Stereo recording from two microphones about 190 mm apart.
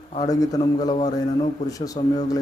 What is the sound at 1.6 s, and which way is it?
Speech, 20° left (ahead or behind).